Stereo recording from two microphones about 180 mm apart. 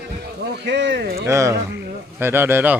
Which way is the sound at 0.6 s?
70° right (ahead or behind).